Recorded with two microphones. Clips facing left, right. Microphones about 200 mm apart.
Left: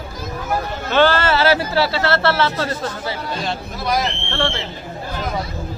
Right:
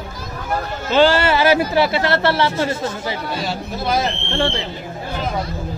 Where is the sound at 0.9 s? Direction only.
15° right (ahead or behind).